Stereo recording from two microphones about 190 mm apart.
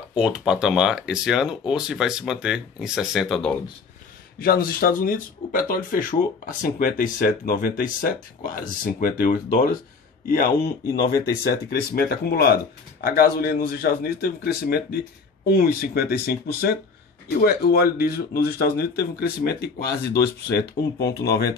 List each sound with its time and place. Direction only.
0.1 s speech: 5° right (ahead or behind)
4.4 s speech: 50° left (ahead or behind)